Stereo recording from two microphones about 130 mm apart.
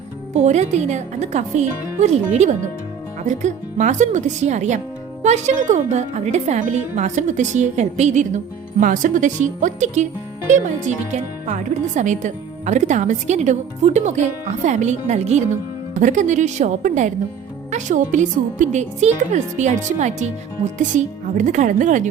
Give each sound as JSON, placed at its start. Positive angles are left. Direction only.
{"t": 0.3, "sound": "speech", "side_deg": -60}
{"t": 8.8, "sound": "speech", "side_deg": -90}
{"t": 16.0, "sound": "speech", "side_deg": -70}